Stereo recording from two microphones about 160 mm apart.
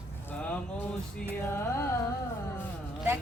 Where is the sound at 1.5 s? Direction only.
15° left (ahead or behind).